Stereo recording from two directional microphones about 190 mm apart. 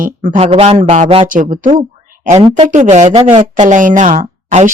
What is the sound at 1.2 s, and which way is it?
A woman's voice, 45° right (ahead or behind).